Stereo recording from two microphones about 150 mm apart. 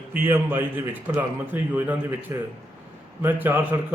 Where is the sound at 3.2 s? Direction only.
15° right (ahead or behind).